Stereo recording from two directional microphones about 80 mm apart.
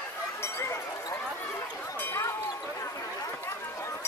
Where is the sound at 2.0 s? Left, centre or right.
Left.